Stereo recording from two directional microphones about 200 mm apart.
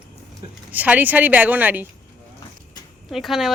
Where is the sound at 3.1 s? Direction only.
Centre (ahead or behind).